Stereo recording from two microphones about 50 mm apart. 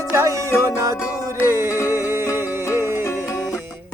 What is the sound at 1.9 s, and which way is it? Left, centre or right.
Music, right.